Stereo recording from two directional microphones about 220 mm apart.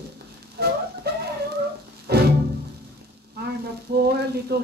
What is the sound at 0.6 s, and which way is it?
Music, 45° right (ahead or behind).